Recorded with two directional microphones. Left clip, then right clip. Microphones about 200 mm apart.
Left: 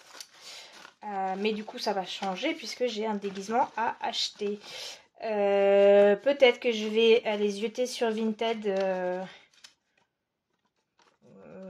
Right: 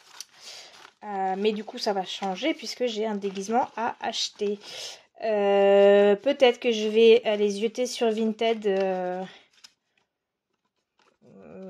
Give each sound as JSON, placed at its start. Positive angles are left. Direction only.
{"t": 0.2, "sound": "speech", "side_deg": -40}